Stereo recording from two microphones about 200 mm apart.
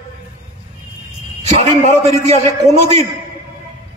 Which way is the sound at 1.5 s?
35° right (ahead or behind).